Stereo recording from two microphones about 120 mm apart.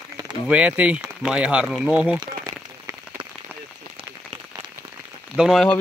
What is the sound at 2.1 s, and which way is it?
Rain on surface, 25° right (ahead or behind).